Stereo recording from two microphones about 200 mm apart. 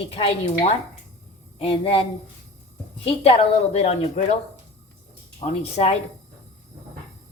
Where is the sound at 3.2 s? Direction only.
30° left (ahead or behind).